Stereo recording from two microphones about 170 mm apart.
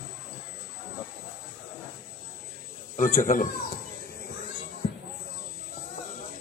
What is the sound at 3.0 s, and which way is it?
Speech, 50° left (ahead or behind).